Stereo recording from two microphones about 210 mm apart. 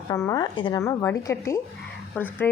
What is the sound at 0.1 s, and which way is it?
A woman's voice, 15° left (ahead or behind).